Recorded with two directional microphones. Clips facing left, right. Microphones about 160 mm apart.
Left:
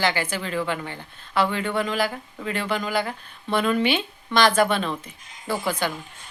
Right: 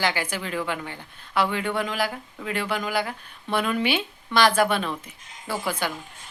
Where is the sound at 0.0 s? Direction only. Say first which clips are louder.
Left 2 dB; 10° right (ahead or behind).